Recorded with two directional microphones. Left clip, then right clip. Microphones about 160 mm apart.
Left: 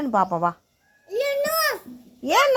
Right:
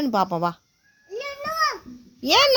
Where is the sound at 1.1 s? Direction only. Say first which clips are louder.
Left 6 dB; 15° right (ahead or behind).